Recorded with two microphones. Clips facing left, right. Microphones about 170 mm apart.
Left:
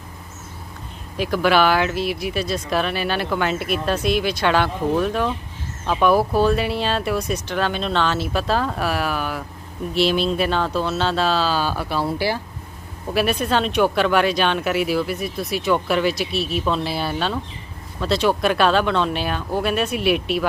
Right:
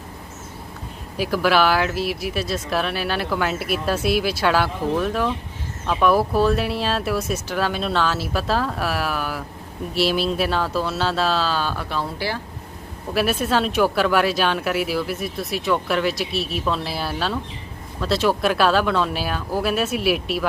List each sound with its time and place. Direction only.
1.1 s speech: 5° right (ahead or behind); by 12.4 s 10° left (ahead or behind)
13.1 s speech: centre (ahead or behind)